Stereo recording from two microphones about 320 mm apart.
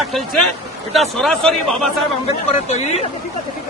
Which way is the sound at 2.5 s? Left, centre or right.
Left.